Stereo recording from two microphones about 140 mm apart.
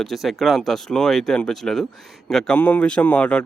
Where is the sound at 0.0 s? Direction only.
Centre (ahead or behind).